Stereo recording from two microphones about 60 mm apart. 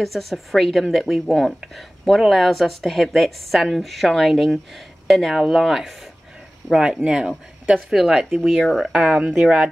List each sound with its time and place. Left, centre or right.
0.0 s speech: centre
7.9 s speech: centre
8.9 s speech: centre